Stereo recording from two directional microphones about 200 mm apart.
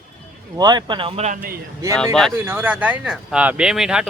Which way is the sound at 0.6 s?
20° right (ahead or behind).